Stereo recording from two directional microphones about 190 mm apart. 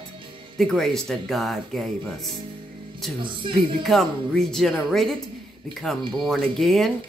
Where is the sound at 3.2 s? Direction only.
25° right (ahead or behind).